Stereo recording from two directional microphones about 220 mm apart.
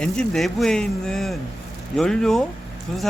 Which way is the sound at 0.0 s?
Centre (ahead or behind).